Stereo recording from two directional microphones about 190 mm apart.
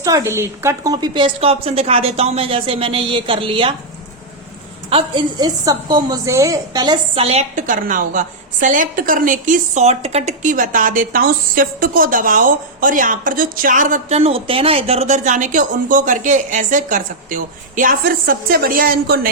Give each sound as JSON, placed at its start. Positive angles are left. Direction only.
{"t": 0.0, "sound": "a woman's voice", "side_deg": -15}
{"t": 4.9, "sound": "a woman's voice", "side_deg": -25}